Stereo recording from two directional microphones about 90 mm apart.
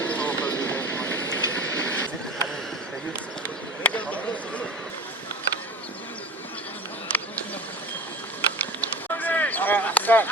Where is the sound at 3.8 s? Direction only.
15° left (ahead or behind).